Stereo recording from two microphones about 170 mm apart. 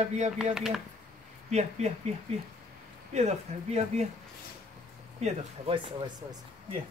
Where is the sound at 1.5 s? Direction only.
40° right (ahead or behind).